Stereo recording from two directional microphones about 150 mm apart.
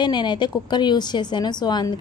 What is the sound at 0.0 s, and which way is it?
A woman's voice, 30° left (ahead or behind).